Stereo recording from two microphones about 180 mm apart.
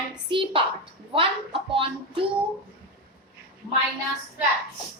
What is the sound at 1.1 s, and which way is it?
A woman's voice, 30° right (ahead or behind).